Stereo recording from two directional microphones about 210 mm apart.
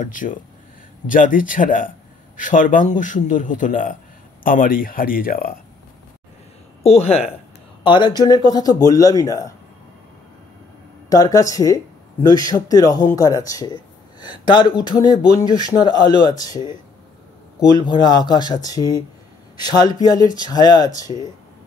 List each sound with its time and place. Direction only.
0.0 s speech: 40° left (ahead or behind)
6.8 s speech: 30° left (ahead or behind)
11.1 s speech: 15° left (ahead or behind)
17.7 s speech: 20° left (ahead or behind)